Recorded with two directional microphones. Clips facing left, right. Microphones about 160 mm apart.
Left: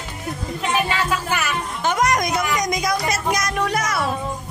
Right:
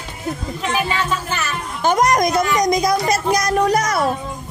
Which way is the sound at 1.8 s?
40° right (ahead or behind).